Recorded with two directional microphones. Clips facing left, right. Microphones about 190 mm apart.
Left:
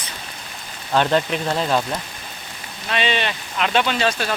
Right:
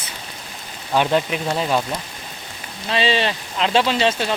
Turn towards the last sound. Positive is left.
turn(degrees=-25)  # may be behind; listen again after turning